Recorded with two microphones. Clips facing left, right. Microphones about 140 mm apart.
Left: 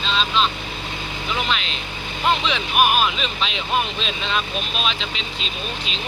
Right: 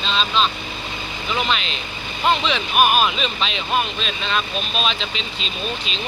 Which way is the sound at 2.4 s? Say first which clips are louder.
Right 1 dB; 10° left (ahead or behind).